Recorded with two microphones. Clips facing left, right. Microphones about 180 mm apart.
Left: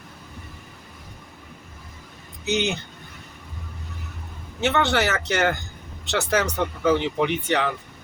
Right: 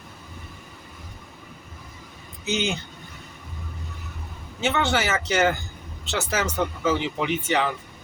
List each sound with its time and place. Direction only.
2.4 s speech: 65° left (ahead or behind)
4.6 s speech: 65° left (ahead or behind)